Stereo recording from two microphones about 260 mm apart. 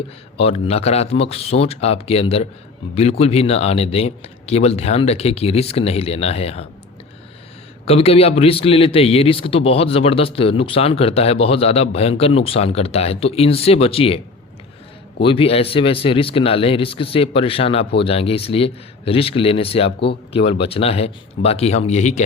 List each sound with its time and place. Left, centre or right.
0.3 s a man's voice: left
7.9 s a man's voice: left
15.2 s a man's voice: centre